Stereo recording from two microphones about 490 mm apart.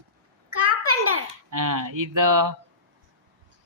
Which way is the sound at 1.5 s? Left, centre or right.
Right.